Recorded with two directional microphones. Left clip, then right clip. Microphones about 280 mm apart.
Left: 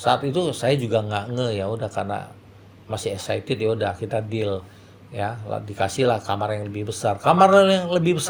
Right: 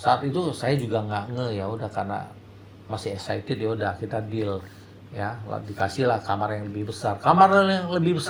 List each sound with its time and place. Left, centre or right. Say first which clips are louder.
0.0 s speech: left 2 dB; left